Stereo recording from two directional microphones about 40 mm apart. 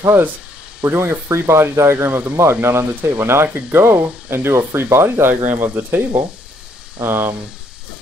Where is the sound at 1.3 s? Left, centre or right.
Right.